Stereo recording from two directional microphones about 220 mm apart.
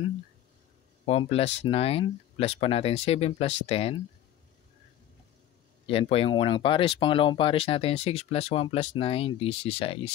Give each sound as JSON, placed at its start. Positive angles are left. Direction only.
{"t": 1.0, "sound": "speech", "side_deg": 25}
{"t": 5.9, "sound": "speech", "side_deg": 25}